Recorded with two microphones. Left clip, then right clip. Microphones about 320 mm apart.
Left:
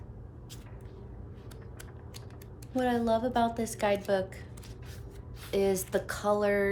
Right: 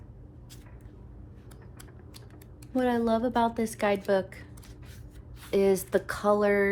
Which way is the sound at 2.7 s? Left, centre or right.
Centre.